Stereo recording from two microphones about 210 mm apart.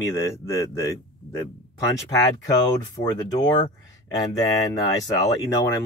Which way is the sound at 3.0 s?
20° left (ahead or behind).